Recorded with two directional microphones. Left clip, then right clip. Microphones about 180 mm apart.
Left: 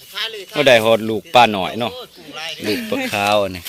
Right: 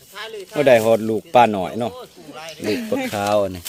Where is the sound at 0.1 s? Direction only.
50° right (ahead or behind).